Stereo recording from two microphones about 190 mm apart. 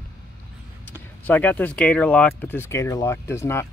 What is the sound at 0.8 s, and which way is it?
Speech, 10° left (ahead or behind).